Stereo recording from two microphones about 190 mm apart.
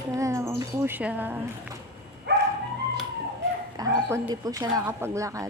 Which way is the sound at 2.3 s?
60° right (ahead or behind).